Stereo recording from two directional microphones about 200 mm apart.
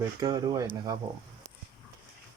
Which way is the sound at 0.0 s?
20° right (ahead or behind).